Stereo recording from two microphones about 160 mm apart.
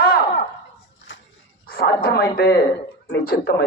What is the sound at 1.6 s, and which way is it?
A man's voice, 75° left (ahead or behind).